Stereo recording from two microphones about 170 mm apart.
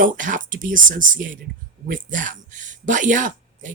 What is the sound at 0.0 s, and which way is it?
Speech, 50° right (ahead or behind).